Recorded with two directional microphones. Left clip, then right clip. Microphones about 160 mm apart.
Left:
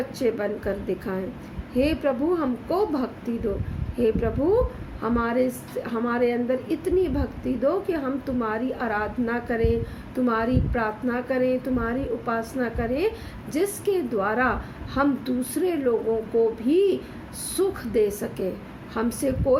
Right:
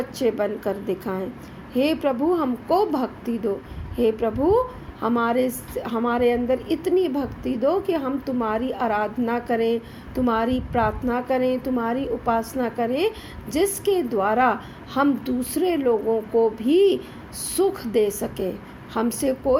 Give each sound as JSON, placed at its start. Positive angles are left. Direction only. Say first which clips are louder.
{"t": 0.2, "sound": "a woman's voice", "louder": "right 3 dB", "side_deg": -35}